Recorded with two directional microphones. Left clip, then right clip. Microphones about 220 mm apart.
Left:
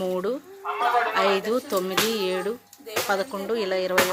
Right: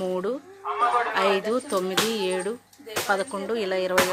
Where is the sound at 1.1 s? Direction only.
Centre (ahead or behind).